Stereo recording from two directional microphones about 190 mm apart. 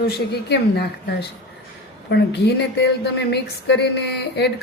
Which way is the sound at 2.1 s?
60° left (ahead or behind).